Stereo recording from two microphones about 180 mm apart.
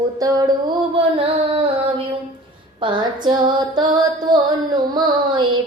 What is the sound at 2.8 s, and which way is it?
Female singing, 25° right (ahead or behind).